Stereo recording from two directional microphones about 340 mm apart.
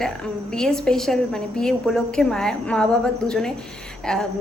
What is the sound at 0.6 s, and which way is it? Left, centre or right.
A woman's voice, centre.